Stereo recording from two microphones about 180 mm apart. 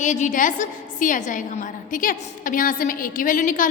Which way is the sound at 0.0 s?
40° left (ahead or behind).